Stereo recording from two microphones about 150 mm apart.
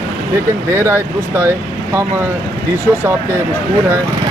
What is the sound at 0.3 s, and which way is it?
Speech, 20° right (ahead or behind).